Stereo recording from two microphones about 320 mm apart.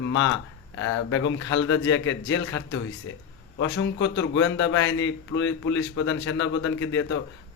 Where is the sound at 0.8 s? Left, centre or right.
Left.